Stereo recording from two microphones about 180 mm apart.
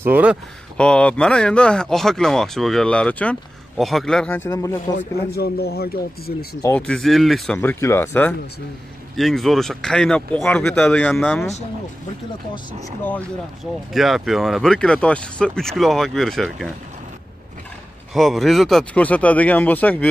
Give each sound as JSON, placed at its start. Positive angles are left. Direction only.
{"t": 0.0, "sound": "speech", "side_deg": -10}
{"t": 0.7, "sound": "speech", "side_deg": 5}
{"t": 4.9, "sound": "speech", "side_deg": 60}
{"t": 6.9, "sound": "speech", "side_deg": 0}
{"t": 7.5, "sound": "speech", "side_deg": 15}
{"t": 13.9, "sound": "speech", "side_deg": 0}
{"t": 18.1, "sound": "speech", "side_deg": 0}